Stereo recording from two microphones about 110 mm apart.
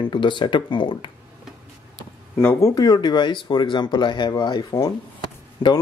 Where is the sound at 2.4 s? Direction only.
25° left (ahead or behind).